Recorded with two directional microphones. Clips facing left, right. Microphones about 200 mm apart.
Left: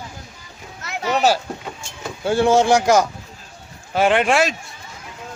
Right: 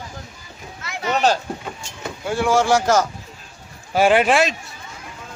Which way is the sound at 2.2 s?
30° left (ahead or behind).